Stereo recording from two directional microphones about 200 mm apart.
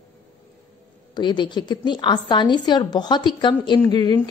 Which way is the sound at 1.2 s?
20° left (ahead or behind).